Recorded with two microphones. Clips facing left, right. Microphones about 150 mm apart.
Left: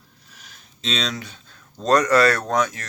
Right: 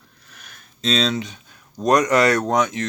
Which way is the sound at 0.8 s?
35° right (ahead or behind).